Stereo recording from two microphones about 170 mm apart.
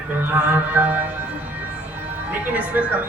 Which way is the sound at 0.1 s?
10° right (ahead or behind).